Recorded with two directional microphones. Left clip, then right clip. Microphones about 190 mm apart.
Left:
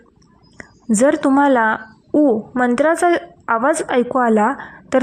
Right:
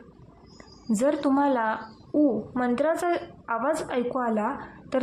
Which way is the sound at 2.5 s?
25° left (ahead or behind).